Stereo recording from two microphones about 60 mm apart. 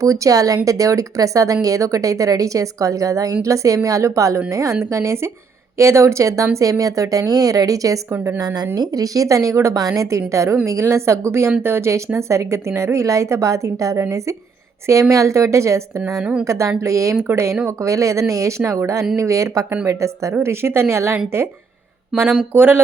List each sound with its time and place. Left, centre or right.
0.0 s a woman's voice: right
8.4 s a woman's voice: right
17.7 s a woman's voice: right
22.5 s speech: right